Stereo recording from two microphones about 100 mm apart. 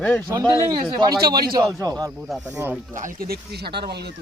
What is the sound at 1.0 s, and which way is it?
A man's voice, 45° right (ahead or behind).